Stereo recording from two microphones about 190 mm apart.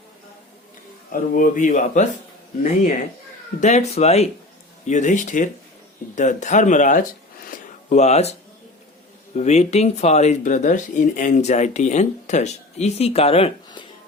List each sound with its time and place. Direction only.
1.1 s speech: 45° left (ahead or behind)
3.6 s speech: 35° left (ahead or behind)
7.5 s a sound: 40° left (ahead or behind)
9.3 s speech: 35° left (ahead or behind)